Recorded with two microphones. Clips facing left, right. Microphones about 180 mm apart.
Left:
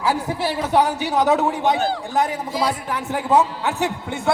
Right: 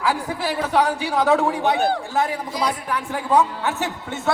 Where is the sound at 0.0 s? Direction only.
20° left (ahead or behind).